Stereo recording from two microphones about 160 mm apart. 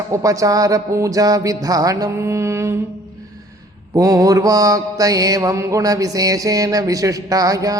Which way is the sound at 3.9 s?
20° right (ahead or behind).